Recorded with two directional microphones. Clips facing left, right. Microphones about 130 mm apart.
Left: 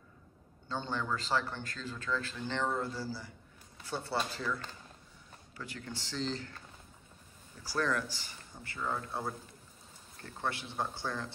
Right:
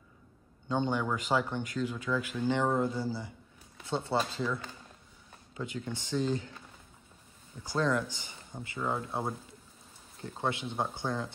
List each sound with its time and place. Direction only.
0.7 s speech: 15° right (ahead or behind)
5.6 s speech: 20° right (ahead or behind)
7.6 s speech: 20° right (ahead or behind)